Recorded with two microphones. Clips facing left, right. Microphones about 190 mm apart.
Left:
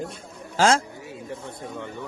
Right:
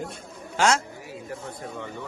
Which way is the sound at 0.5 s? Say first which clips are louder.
Left 3 dB; 30° left (ahead or behind).